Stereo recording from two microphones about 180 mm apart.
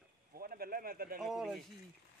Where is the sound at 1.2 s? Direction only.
Centre (ahead or behind).